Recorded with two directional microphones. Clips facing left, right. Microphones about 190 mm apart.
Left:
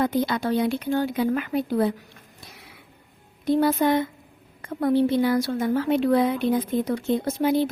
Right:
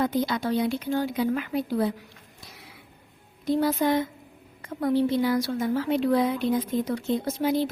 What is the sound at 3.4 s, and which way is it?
A woman's voice, 60° left (ahead or behind).